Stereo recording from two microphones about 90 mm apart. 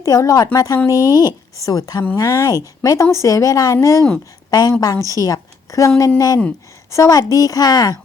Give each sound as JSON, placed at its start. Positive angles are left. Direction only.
{"t": 0.0, "sound": "a woman's voice", "side_deg": 40}